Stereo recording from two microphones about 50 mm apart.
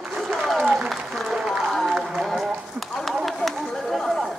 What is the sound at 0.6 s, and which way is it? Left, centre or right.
Applause, centre.